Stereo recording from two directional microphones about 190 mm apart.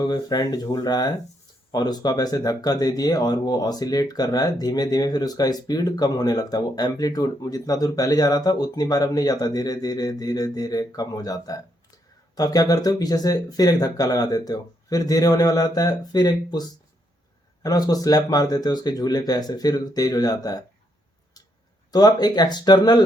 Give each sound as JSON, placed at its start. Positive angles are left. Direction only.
{"t": 0.0, "sound": "speech", "side_deg": 20}
{"t": 21.9, "sound": "speech", "side_deg": 20}